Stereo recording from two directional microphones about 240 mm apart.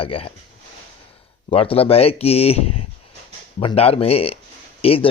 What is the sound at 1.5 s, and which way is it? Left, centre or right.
A man's voice, left.